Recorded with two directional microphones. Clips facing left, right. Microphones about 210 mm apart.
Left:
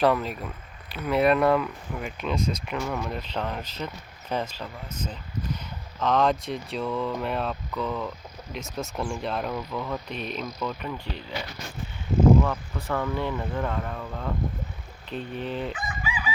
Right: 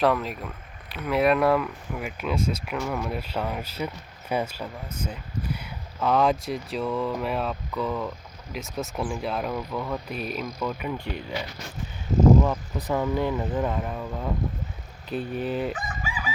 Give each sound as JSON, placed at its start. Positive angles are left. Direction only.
{"t": 0.0, "sound": "speech", "side_deg": 0}
{"t": 12.4, "sound": "speech", "side_deg": -20}
{"t": 15.7, "sound": "crowing", "side_deg": -45}